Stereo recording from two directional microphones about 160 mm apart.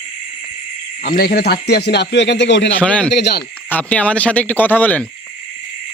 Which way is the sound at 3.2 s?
90° left.